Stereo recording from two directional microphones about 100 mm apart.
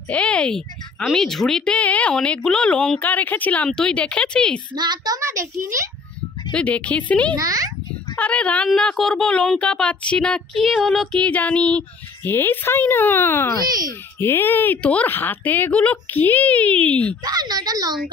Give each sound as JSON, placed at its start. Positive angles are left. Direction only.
{"t": 0.1, "sound": "speech", "side_deg": 10}
{"t": 4.7, "sound": "a woman's voice", "side_deg": -45}
{"t": 5.2, "sound": "a woman's voice", "side_deg": -30}
{"t": 6.5, "sound": "speech", "side_deg": 15}
{"t": 7.3, "sound": "a woman's voice", "side_deg": -35}
{"t": 8.2, "sound": "speech", "side_deg": 15}
{"t": 17.2, "sound": "a woman's voice", "side_deg": -40}